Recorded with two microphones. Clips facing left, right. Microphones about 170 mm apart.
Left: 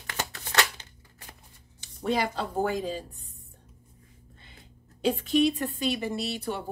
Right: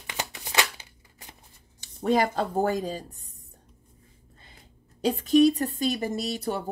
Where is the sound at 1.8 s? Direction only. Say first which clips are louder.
Right 4 dB; 45° right (ahead or behind).